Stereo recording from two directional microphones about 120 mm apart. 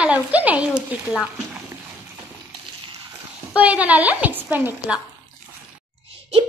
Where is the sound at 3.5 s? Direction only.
10° right (ahead or behind).